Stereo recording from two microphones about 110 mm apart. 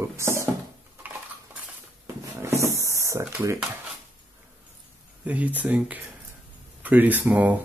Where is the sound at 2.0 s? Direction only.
25° right (ahead or behind).